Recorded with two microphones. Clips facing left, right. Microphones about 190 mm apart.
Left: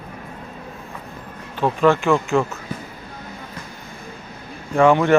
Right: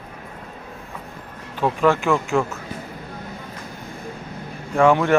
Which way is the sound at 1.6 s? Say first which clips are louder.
Left 2 dB; 5° right (ahead or behind).